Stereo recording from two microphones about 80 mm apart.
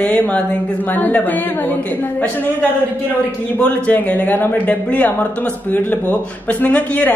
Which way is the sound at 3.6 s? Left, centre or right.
Centre.